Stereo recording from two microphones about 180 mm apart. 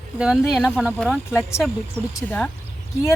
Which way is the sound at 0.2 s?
5° right (ahead or behind).